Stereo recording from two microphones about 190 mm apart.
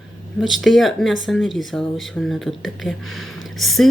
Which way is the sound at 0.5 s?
Centre (ahead or behind).